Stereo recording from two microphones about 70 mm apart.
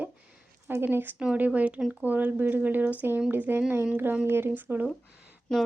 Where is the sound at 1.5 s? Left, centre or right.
Centre.